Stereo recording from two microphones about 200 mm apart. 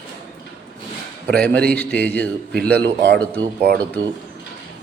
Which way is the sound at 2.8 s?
60° right (ahead or behind).